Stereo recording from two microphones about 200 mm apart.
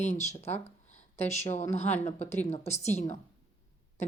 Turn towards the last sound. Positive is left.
turn(degrees=35)  # may be behind; listen again after turning